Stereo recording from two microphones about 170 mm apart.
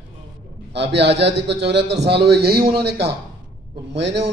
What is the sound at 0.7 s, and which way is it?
A man's voice, 85° right.